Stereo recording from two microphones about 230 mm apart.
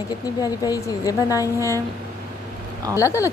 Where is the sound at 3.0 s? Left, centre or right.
Centre.